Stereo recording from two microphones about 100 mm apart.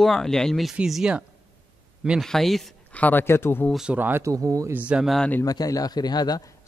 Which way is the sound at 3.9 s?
20° right (ahead or behind).